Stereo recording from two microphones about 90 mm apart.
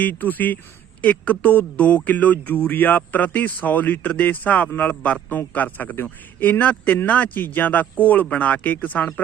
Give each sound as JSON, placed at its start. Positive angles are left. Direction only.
{"t": 0.0, "sound": "a man's voice", "side_deg": 20}